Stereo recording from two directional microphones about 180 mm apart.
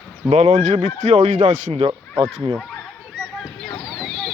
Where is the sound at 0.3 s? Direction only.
40° right (ahead or behind).